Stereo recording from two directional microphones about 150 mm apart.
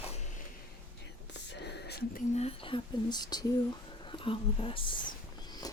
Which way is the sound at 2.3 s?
40° left (ahead or behind).